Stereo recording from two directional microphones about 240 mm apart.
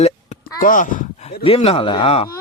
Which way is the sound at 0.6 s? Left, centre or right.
Left.